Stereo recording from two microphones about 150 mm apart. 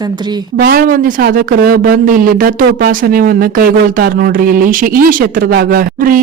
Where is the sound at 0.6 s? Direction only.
75° right (ahead or behind).